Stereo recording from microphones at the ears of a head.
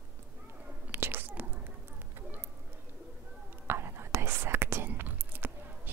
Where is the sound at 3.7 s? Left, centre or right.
Right.